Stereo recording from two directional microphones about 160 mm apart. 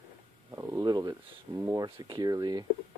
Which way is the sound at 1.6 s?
15° right (ahead or behind).